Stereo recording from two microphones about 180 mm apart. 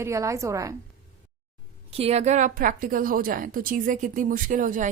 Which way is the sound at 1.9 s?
35° right (ahead or behind).